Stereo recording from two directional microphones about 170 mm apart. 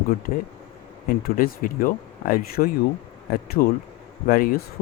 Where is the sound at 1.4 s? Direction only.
55° left (ahead or behind).